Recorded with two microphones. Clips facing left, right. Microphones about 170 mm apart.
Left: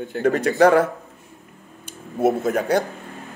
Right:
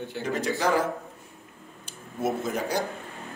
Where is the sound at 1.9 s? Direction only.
60° left (ahead or behind).